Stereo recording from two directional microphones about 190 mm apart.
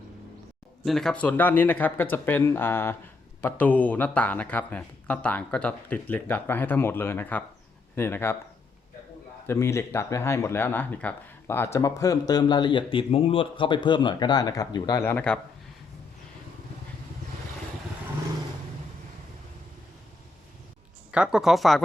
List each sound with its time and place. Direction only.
0.9 s speech: centre (ahead or behind)
9.5 s speech: 15° left (ahead or behind)
15.0 s speech: 10° left (ahead or behind)
21.1 s speech: 5° right (ahead or behind)